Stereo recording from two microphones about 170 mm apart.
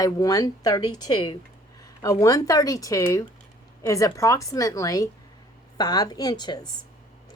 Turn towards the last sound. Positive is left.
turn(degrees=25)  # may be behind; listen again after turning